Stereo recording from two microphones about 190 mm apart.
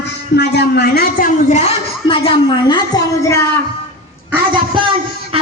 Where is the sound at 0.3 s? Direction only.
60° left (ahead or behind).